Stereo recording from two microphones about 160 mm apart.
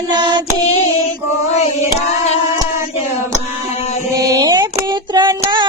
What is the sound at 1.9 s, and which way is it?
Singing, 40° left (ahead or behind).